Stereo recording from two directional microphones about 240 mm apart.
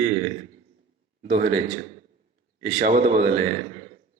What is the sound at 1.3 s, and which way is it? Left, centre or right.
Speech, right.